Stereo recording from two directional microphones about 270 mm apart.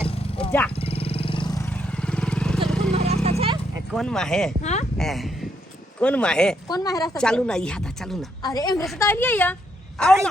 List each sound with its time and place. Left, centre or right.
0.8 s vehicle: left
2.0 s vehicle: centre
2.6 s a sound: centre
2.9 s vehicle: right
3.2 s horse: right
3.9 s a woman's voice: centre
4.6 s speech: left
4.9 s a woman's voice: centre
6.7 s speech: centre
7.2 s a woman's voice: centre
8.4 s a woman's voice: centre